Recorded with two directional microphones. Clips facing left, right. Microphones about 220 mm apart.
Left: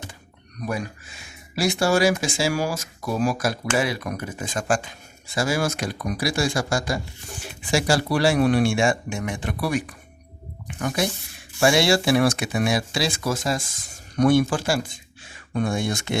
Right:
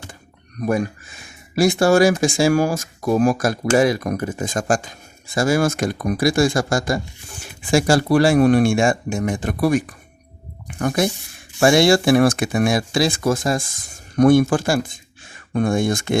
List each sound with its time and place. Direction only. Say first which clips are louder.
0.6 s speech: right 8 dB; 50° right (ahead or behind)